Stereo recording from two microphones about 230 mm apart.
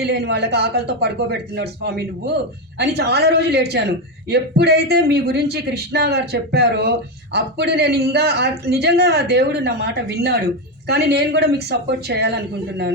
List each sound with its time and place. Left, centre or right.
0.0 s a man's voice: right